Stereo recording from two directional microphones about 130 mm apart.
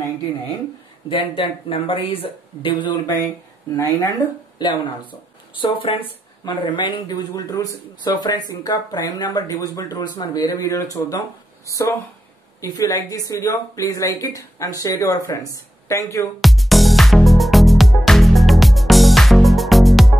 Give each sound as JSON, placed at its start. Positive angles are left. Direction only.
{"t": 1.0, "sound": "speech", "side_deg": 40}
{"t": 3.7, "sound": "speech", "side_deg": 25}
{"t": 4.6, "sound": "speech", "side_deg": 35}
{"t": 16.3, "sound": "music", "side_deg": 0}